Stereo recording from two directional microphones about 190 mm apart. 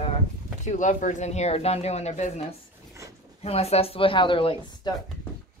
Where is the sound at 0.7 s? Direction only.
40° left (ahead or behind).